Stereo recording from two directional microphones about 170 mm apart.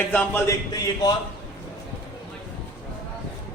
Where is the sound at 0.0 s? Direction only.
10° left (ahead or behind).